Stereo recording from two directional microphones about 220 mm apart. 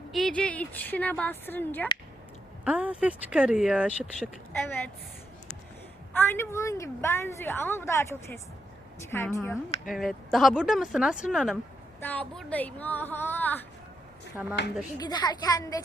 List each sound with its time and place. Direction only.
0.1 s a woman's voice: centre (ahead or behind)
2.6 s speech: 5° right (ahead or behind)
6.1 s a woman's voice: 10° left (ahead or behind)
9.8 s a woman's voice: centre (ahead or behind)
14.4 s speech: 5° right (ahead or behind)
14.9 s a woman's voice: 20° left (ahead or behind)